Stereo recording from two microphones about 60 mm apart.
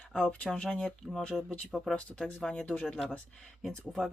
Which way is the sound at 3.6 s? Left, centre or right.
Centre.